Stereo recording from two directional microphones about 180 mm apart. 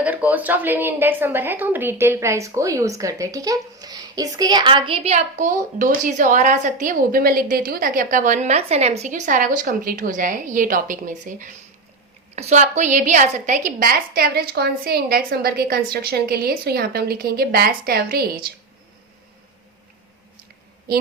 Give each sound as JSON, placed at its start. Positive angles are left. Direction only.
{"t": 0.0, "sound": "a woman's voice", "side_deg": -10}
{"t": 13.7, "sound": "a woman's voice", "side_deg": -50}
{"t": 20.9, "sound": "a woman's voice", "side_deg": -55}